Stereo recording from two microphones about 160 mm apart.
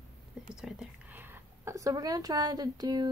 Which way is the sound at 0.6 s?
5° right (ahead or behind).